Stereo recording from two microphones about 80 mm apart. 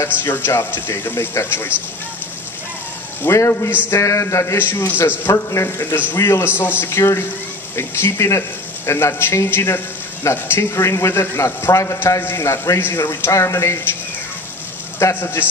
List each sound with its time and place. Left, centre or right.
0.2 s speech: left
3.2 s speech: left
5.3 s speech: left
12.2 s speech: left
15.1 s speech: left